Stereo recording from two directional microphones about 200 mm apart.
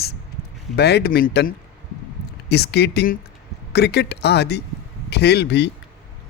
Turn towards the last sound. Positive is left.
turn(degrees=60)  # may be behind; listen again after turning